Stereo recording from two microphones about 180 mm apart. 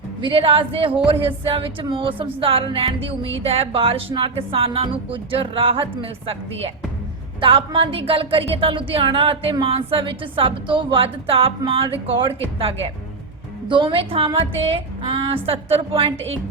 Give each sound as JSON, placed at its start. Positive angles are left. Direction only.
{"t": 0.2, "sound": "speech", "side_deg": -30}